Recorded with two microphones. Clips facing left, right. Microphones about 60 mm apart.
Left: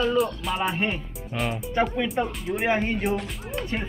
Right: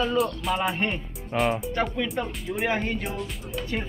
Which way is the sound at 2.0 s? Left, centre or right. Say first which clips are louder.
Left 3 dB; centre.